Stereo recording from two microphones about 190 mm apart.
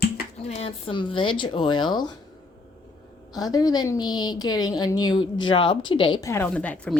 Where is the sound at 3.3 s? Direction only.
20° left (ahead or behind).